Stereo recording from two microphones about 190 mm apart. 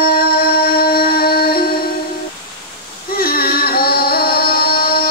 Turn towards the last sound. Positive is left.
turn(degrees=50)  # may be behind; listen again after turning